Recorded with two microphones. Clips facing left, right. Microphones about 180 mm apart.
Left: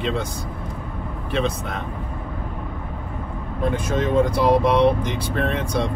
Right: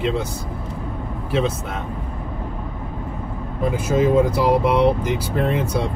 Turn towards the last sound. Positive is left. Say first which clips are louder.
# right 2 dB
turn(degrees=-5)  # may be behind; listen again after turning